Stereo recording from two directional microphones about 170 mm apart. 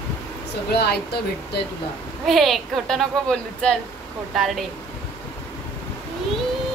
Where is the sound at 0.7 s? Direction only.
70° left (ahead or behind).